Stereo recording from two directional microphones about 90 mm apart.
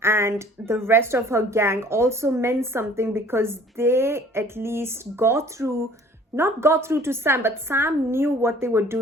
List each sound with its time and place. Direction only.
0.0 s a woman's voice: 30° right (ahead or behind)